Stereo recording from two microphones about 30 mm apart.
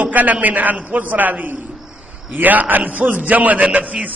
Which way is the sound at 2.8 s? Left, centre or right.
Right.